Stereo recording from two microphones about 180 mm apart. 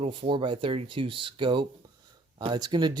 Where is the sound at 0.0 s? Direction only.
30° right (ahead or behind).